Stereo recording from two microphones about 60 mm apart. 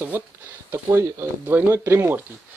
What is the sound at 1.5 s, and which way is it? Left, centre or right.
Speech, right.